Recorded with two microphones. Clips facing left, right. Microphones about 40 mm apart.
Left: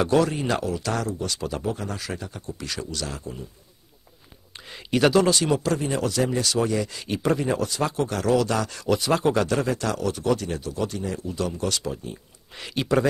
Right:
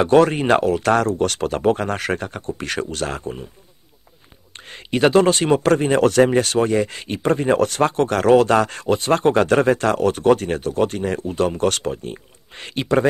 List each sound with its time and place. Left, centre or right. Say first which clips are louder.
0.0 s speech: right 7 dB; right
4.6 s speech: right 3 dB; right